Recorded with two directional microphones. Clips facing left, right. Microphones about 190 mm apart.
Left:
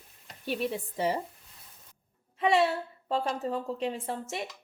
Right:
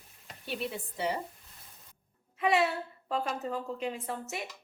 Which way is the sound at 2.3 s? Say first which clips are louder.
Left 2 dB; 30° left (ahead or behind).